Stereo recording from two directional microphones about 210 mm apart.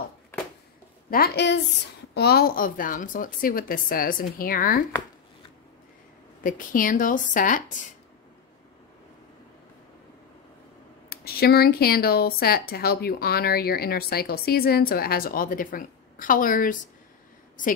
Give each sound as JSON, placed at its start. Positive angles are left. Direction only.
{"t": 1.1, "sound": "speech", "side_deg": 50}
{"t": 6.4, "sound": "speech", "side_deg": 40}
{"t": 11.1, "sound": "speech", "side_deg": 45}